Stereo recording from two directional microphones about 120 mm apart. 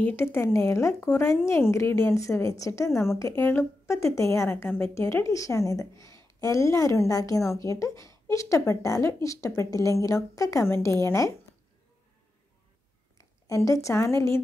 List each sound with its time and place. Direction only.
0.0 s a woman's voice: 20° left (ahead or behind)
13.2 s a woman's voice: 25° left (ahead or behind)